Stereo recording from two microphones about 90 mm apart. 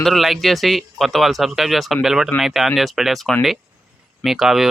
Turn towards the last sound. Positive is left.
turn(degrees=-5)  # may be behind; listen again after turning